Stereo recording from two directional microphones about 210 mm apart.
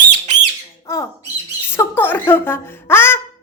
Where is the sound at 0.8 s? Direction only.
15° left (ahead or behind).